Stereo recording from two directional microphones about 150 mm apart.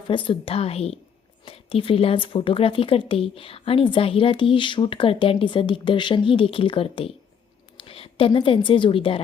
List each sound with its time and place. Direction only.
0.1 s a woman's voice: 35° left (ahead or behind)